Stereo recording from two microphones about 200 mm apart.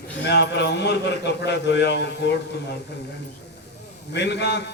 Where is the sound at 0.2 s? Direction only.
60° left (ahead or behind).